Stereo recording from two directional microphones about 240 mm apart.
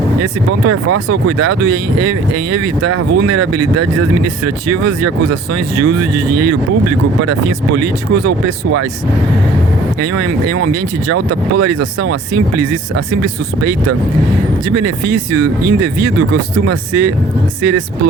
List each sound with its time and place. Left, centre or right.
0.2 s speech: right
10.0 s speech: right